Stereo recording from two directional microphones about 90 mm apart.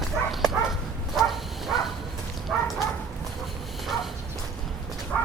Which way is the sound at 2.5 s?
Centre (ahead or behind).